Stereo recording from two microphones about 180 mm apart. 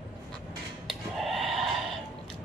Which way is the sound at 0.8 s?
Centre (ahead or behind).